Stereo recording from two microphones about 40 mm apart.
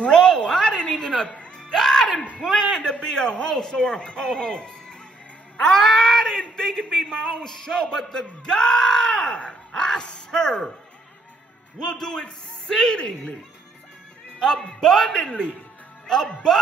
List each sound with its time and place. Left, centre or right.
0.0 s a sound: left
1.3 s music: left
1.7 s music: centre
2.3 s a sound: centre
2.8 s a man's voice: left
5.7 s a sound: centre
6.6 s speech: centre
11.8 s a man's voice: centre
14.4 s speech: centre
15.0 s a man's voice: left